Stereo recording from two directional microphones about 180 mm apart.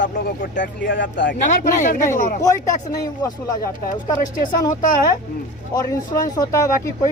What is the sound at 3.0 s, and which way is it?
Speech, 20° left (ahead or behind).